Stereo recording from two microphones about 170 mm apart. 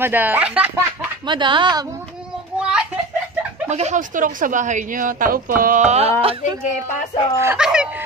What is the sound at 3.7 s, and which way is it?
Speech, 45° right (ahead or behind).